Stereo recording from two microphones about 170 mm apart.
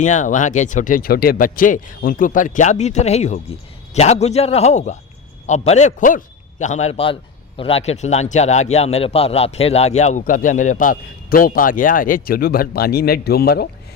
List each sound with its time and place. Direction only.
0.0 s a man's voice: 45° left (ahead or behind); by 13.7 s 65° left (ahead or behind)